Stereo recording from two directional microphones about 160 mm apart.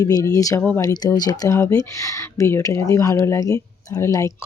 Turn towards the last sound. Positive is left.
turn(degrees=20)  # may be behind; listen again after turning